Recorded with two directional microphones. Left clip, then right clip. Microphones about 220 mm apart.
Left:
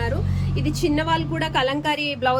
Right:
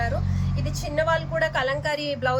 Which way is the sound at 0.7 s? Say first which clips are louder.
Left 1 dB; 15° left (ahead or behind).